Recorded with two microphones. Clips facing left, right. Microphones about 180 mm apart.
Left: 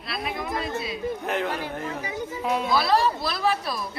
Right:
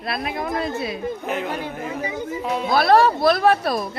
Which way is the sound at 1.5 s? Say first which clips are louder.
Right 2 dB; 25° right (ahead or behind).